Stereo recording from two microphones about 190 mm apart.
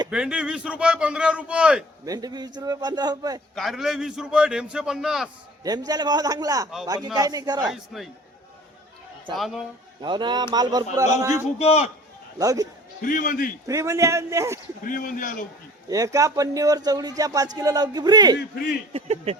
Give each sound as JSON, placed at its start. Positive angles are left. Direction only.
{"t": 0.1, "sound": "a man's voice", "side_deg": -5}
{"t": 2.0, "sound": "speech", "side_deg": -20}
{"t": 3.5, "sound": "a man's voice", "side_deg": 0}
{"t": 5.6, "sound": "speech", "side_deg": -20}
{"t": 7.7, "sound": "a man's voice", "side_deg": 0}
{"t": 9.3, "sound": "a man's voice", "side_deg": 0}
{"t": 10.0, "sound": "a man's voice", "side_deg": -25}
{"t": 11.6, "sound": "speech", "side_deg": 30}
{"t": 12.4, "sound": "a man's voice", "side_deg": -20}
{"t": 13.0, "sound": "a man's voice", "side_deg": 45}
{"t": 13.7, "sound": "a man's voice", "side_deg": -15}
{"t": 14.8, "sound": "a man's voice", "side_deg": 45}
{"t": 15.9, "sound": "speech", "side_deg": -15}
{"t": 18.9, "sound": "speech", "side_deg": -35}